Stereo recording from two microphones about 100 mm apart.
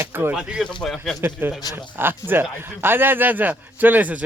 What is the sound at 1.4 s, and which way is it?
A man's voice, 20° right (ahead or behind).